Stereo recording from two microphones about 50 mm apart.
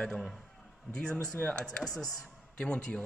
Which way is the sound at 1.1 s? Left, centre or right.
Left.